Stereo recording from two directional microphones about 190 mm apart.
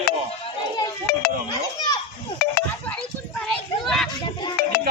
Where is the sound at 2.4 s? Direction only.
55° left (ahead or behind).